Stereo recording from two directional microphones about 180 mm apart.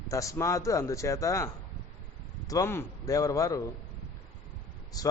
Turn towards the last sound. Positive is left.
turn(degrees=20)  # may be behind; listen again after turning